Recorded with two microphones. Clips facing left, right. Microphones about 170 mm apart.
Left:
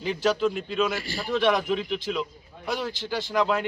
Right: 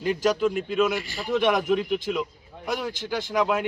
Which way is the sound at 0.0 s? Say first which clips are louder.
Right 1 dB; 5° right (ahead or behind).